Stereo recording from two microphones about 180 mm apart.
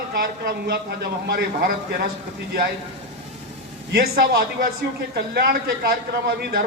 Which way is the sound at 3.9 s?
55° right (ahead or behind).